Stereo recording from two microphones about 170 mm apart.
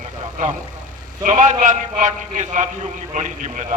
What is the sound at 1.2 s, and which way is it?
A man's voice, 45° right (ahead or behind).